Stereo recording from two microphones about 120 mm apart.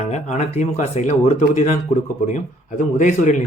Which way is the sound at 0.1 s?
70° left (ahead or behind).